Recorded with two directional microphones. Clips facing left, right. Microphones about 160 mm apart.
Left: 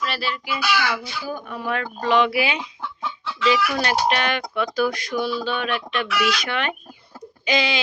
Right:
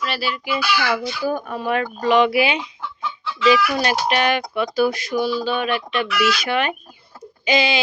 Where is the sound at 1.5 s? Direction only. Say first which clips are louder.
Right 4 dB; 20° right (ahead or behind).